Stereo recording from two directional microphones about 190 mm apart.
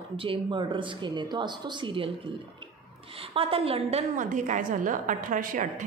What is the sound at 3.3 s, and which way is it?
A woman's voice, 30° right (ahead or behind).